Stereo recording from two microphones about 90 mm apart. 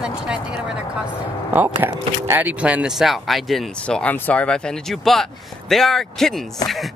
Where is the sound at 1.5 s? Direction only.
20° right (ahead or behind).